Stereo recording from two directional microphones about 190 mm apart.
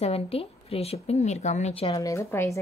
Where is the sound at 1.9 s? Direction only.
15° left (ahead or behind).